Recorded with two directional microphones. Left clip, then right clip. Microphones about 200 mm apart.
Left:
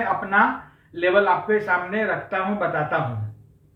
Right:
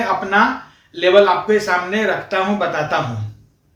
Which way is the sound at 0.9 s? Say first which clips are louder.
Right 6 dB; 15° right (ahead or behind).